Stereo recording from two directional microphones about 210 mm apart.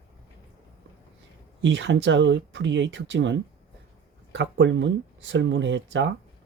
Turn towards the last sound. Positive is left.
turn(degrees=-60)  # may be behind; listen again after turning